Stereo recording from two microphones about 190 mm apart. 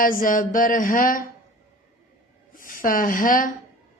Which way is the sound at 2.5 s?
45° left (ahead or behind).